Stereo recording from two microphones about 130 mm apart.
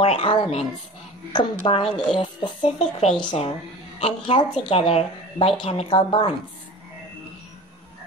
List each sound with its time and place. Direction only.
0.0 s a woman's voice: 45° left (ahead or behind)